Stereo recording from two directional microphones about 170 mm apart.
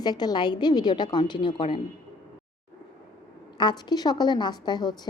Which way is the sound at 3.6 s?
25° left (ahead or behind).